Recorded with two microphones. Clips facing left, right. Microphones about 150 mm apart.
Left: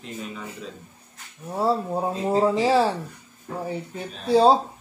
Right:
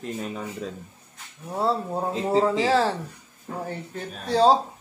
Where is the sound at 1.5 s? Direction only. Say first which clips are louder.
Left 2 dB; 10° left (ahead or behind).